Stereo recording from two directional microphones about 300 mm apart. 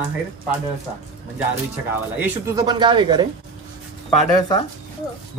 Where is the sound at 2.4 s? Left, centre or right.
Centre.